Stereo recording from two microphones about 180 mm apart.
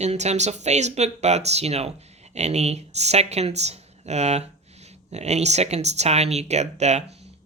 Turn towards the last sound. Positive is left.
turn(degrees=-40)  # may be behind; listen again after turning